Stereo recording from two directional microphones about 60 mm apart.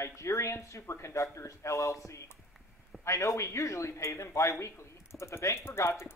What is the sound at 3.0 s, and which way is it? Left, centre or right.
A man's voice, left.